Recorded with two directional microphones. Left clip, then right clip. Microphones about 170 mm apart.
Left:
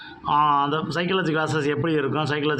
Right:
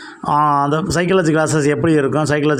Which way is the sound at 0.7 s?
45° right (ahead or behind).